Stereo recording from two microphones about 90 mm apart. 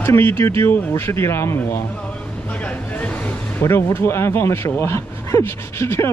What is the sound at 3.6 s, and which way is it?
Speech, 25° left (ahead or behind).